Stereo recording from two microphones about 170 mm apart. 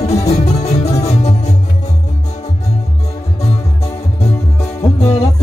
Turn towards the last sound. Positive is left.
turn(degrees=35)  # may be behind; listen again after turning